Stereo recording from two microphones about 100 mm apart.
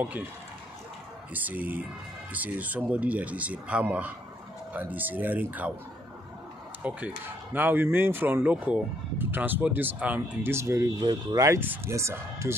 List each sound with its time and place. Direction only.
1.3 s speech: 15° right (ahead or behind)
6.8 s speech: 15° right (ahead or behind)
11.0 s speech: 45° right (ahead or behind)
11.6 s speech: 20° right (ahead or behind)
11.9 s speech: 30° right (ahead or behind)